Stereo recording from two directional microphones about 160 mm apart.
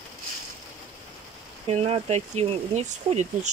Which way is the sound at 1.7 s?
40° right (ahead or behind).